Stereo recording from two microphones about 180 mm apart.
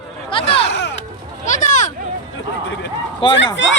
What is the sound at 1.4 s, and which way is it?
Speech, 45° left (ahead or behind).